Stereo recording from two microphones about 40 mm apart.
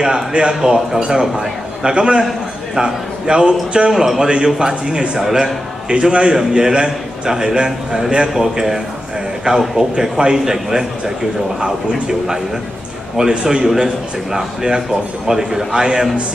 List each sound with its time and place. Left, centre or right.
0.0 s a man's voice: right
4.0 s a man's voice: centre